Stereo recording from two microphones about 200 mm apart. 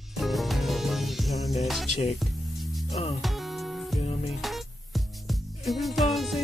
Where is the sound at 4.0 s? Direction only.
30° left (ahead or behind).